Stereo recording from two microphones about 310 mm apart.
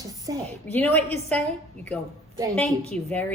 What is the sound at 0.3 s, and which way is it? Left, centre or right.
Speech, centre.